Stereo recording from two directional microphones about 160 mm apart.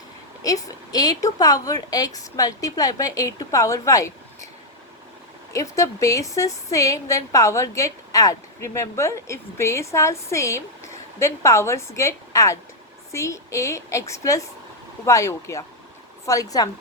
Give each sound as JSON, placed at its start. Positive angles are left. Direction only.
{"t": 0.4, "sound": "a woman's voice", "side_deg": 20}
{"t": 5.5, "sound": "a woman's voice", "side_deg": 20}